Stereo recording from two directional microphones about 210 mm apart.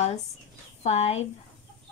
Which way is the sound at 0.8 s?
30° left (ahead or behind).